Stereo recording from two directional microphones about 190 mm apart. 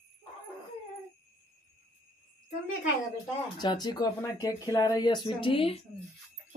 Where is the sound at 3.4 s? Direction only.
20° left (ahead or behind).